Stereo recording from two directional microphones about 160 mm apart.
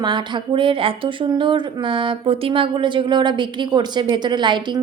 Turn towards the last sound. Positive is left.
turn(degrees=-30)  # may be behind; listen again after turning